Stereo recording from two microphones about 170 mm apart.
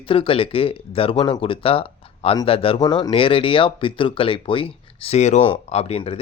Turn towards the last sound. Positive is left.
turn(degrees=35)  # may be behind; listen again after turning